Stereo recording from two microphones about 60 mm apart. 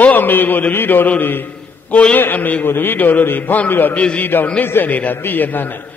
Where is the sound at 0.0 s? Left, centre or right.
Left.